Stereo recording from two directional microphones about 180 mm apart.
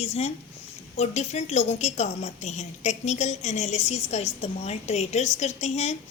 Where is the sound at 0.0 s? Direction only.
35° left (ahead or behind).